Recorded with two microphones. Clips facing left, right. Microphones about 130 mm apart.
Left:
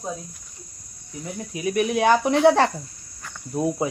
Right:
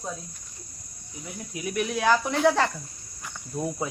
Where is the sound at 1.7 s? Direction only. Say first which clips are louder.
Left 4 dB; 20° left (ahead or behind).